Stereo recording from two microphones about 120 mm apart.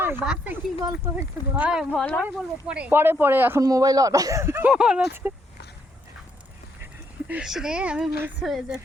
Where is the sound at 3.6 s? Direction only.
30° right (ahead or behind).